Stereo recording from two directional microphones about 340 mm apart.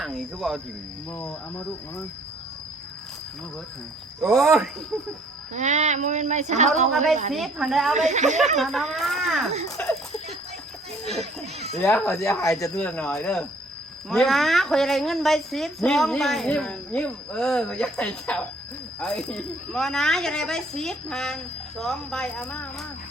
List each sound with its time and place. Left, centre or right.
0.0 s a woman's voice: centre
4.2 s a woman's voice: centre
5.5 s speech: right
7.3 s a woman's voice: centre
7.9 s speech: right
8.5 s a woman's voice: centre
11.1 s a woman's voice: centre